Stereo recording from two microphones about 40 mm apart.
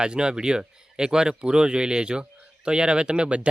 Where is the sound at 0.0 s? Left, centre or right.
Right.